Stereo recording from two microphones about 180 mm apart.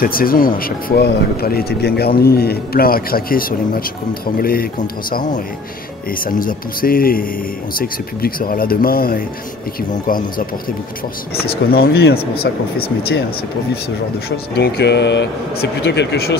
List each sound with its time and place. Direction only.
0.0 s speech: 55° left (ahead or behind)
11.4 s speech: 60° left (ahead or behind)
14.3 s speech: 65° left (ahead or behind)